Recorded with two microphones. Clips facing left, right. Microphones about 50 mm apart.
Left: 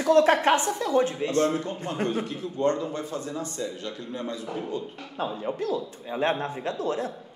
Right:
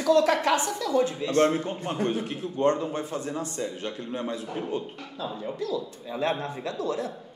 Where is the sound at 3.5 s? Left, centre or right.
Right.